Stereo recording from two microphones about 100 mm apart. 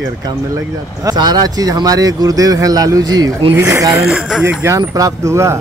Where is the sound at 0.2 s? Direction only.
40° right (ahead or behind).